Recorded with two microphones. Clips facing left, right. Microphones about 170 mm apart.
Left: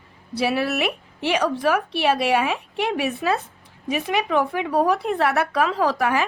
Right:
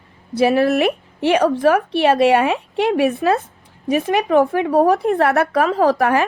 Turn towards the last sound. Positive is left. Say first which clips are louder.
# right 6 dB
turn(degrees=-55)  # may be behind; listen again after turning